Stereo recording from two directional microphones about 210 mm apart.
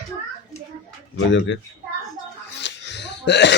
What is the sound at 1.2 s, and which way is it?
Speech, 60° left (ahead or behind).